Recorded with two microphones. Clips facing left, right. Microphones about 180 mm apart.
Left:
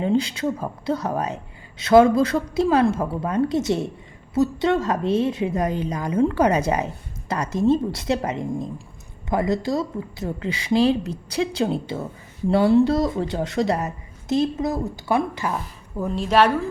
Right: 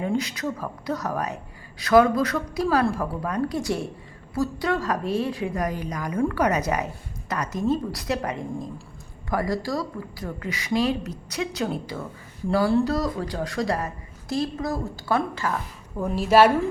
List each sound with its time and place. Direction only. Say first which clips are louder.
0.0 s a woman's voice: left 5 dB; 30° left (ahead or behind)
16.0 s a woman's voice: right 1 dB; 5° right (ahead or behind)